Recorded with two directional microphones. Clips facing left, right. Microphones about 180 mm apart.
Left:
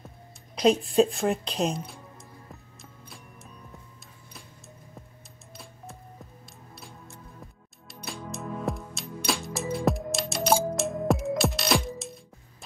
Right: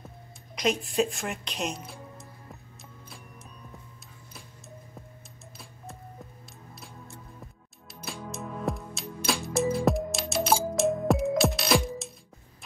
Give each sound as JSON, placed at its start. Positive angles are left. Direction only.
{"t": 0.6, "sound": "a woman's voice", "side_deg": 30}
{"t": 1.8, "sound": "music", "side_deg": 0}
{"t": 7.9, "sound": "music", "side_deg": 0}